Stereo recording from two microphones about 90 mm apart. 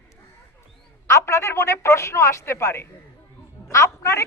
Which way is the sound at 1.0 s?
35° left (ahead or behind).